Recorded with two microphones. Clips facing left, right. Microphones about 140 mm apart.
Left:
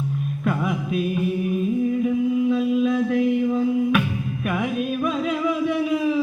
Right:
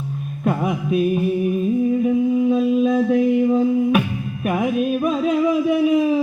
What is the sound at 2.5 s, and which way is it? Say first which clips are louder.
Music: right 3 dB; 40° right (ahead or behind).